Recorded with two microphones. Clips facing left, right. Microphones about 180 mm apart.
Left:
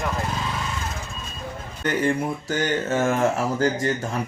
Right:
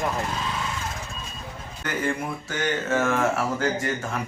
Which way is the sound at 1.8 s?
30° left (ahead or behind).